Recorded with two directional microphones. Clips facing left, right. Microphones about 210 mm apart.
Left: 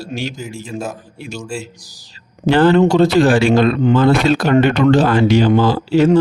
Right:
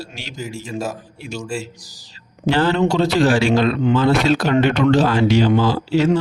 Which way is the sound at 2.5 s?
55° left (ahead or behind).